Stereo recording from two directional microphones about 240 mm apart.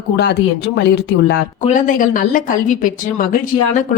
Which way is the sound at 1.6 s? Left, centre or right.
Left.